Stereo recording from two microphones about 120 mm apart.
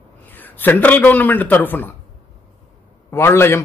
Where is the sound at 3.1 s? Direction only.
20° left (ahead or behind).